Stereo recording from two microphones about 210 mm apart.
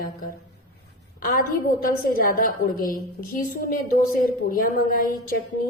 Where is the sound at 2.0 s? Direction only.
40° left (ahead or behind).